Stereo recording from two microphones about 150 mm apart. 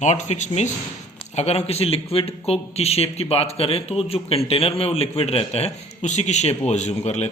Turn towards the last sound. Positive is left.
turn(degrees=50)  # may be behind; listen again after turning